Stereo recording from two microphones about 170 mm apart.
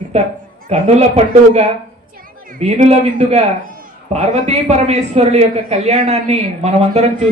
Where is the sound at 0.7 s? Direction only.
35° right (ahead or behind).